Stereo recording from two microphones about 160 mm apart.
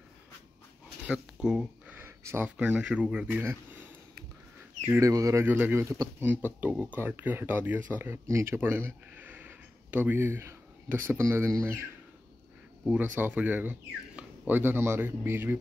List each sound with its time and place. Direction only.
1.0 s speech: 5° right (ahead or behind)
4.9 s speech: 20° right (ahead or behind)
12.8 s speech: 10° right (ahead or behind)